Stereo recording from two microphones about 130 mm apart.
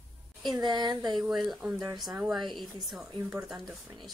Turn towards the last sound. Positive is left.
turn(degrees=-35)  # may be behind; listen again after turning